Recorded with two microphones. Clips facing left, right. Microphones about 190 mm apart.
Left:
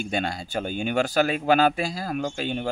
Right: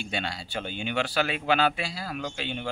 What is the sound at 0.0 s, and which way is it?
Speech, 45° left (ahead or behind).